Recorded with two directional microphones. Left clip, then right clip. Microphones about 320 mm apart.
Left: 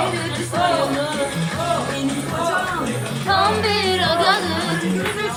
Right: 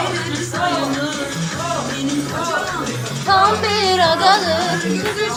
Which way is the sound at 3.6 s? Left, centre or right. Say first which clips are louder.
Right 4 dB; centre.